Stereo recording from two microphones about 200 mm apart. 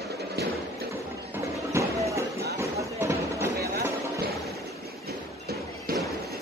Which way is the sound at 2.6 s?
15° right (ahead or behind).